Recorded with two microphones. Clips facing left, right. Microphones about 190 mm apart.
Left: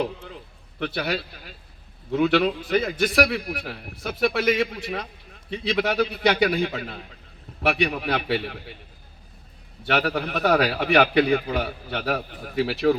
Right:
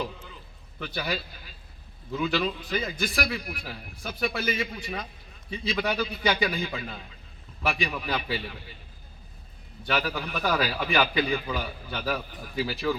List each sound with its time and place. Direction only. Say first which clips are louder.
0.8 s a man's voice: left 5 dB; 70° left (ahead or behind)
9.8 s a man's voice: left 5 dB; 65° left (ahead or behind)